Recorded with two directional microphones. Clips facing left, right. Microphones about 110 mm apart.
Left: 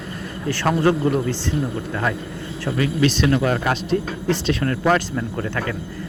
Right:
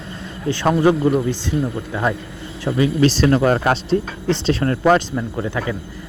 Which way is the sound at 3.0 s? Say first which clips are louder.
Right 2 dB; 35° right (ahead or behind).